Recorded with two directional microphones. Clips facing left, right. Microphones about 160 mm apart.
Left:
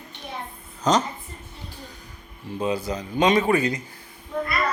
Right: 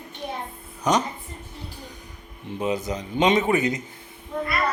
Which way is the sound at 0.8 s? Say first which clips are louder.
Left 1 dB; 15° right (ahead or behind).